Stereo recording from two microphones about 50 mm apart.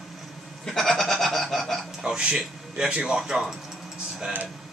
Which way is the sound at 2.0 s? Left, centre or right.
Centre.